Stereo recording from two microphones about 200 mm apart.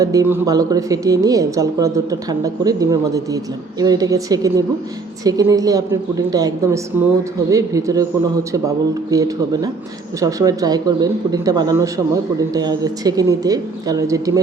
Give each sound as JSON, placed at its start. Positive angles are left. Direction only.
{"t": 0.0, "sound": "a woman's voice", "side_deg": -15}